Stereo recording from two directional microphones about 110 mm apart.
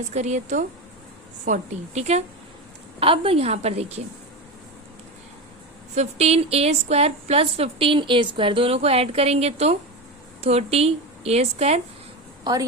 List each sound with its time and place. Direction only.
0.1 s a woman's voice: 90° right
3.0 s a woman's voice: 60° right (ahead or behind)
5.9 s a woman's voice: 75° right (ahead or behind)